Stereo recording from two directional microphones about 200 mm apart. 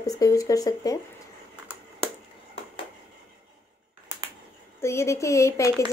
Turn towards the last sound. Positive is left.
turn(degrees=15)  # may be behind; listen again after turning